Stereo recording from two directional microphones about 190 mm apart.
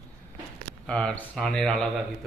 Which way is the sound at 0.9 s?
5° left (ahead or behind).